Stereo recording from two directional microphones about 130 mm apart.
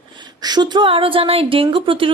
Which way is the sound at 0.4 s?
35° right (ahead or behind).